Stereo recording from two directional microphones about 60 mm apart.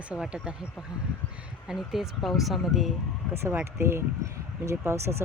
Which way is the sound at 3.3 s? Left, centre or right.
Right.